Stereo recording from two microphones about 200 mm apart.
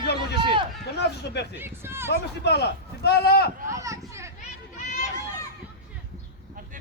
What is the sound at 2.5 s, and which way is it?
Speech, 55° left (ahead or behind).